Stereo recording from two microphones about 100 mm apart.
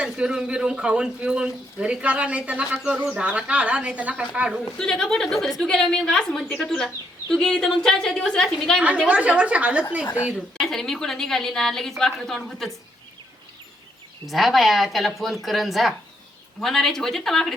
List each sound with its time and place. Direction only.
0.0 s speech: 10° right (ahead or behind)
4.8 s a woman's voice: 5° left (ahead or behind)
9.0 s speech: 15° right (ahead or behind)
10.0 s speech: 20° left (ahead or behind)
10.6 s a woman's voice: 5° left (ahead or behind)
14.3 s a woman's voice: centre (ahead or behind)